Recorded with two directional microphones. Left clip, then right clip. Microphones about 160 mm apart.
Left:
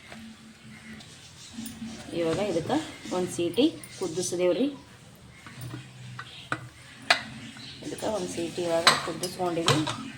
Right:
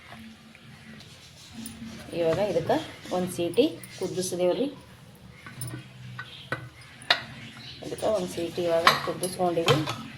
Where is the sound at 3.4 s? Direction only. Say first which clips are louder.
Right 1 dB; 15° right (ahead or behind).